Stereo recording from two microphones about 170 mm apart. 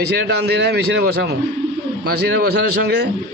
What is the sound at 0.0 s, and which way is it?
A man's voice, 75° right (ahead or behind).